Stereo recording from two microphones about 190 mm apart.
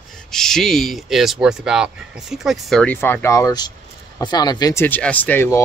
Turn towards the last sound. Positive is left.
turn(degrees=15)  # may be behind; listen again after turning